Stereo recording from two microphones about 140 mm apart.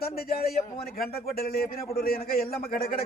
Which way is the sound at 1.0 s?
90° left.